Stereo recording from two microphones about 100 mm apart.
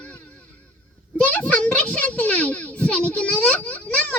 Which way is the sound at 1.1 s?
15° left (ahead or behind).